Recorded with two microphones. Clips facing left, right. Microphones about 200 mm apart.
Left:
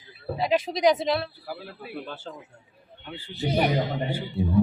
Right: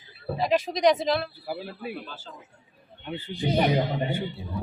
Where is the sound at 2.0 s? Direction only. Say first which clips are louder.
Left 6 dB; 60° left (ahead or behind).